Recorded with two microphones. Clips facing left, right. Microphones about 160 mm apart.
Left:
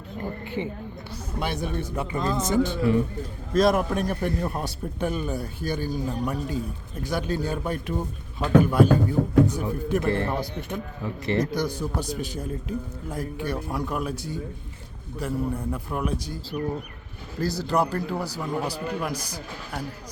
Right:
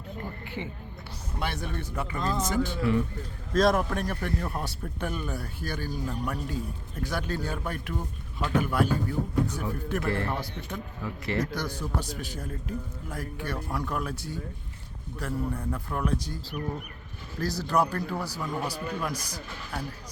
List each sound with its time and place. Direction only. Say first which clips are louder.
0.6 s speech: left 7 dB; 20° left (ahead or behind)
3.5 s a man's voice: left 3 dB; 10° left (ahead or behind)
17.4 s a man's voice: left 2 dB; 10° left (ahead or behind)